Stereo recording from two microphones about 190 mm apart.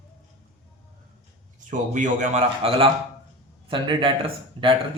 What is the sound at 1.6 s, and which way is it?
Speech, 40° right (ahead or behind).